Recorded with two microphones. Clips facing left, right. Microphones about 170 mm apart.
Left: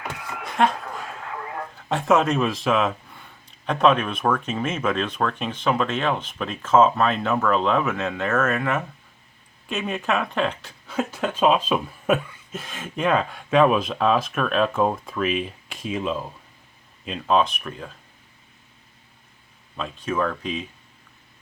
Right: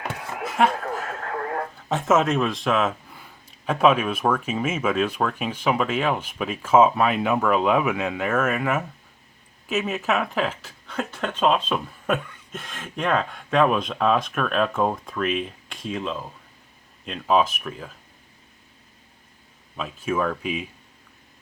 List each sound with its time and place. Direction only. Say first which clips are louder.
0.4 s chuckle: even; 5° right (ahead or behind)
0.8 s radio: right 5 dB; 60° right (ahead or behind)
1.9 s speech: left 1 dB; centre (ahead or behind)
10.8 s speech: left 3 dB; 10° left (ahead or behind)
17.1 s speech: even; 5° right (ahead or behind)
19.7 s speech: right 1 dB; 5° right (ahead or behind)